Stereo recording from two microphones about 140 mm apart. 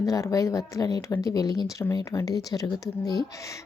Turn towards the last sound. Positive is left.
turn(degrees=25)  # may be behind; listen again after turning